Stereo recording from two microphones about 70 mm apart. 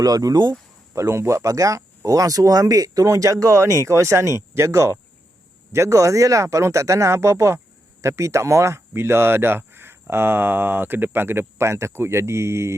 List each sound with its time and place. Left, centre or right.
0.0 s speech: right
0.9 s speech: right